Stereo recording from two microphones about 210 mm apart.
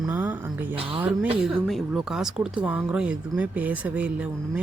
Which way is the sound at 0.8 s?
25° right (ahead or behind).